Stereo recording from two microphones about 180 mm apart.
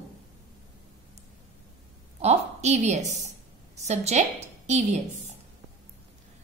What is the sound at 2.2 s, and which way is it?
A woman's voice, 40° right (ahead or behind).